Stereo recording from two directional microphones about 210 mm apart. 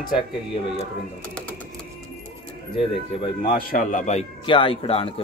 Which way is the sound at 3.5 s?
40° left (ahead or behind).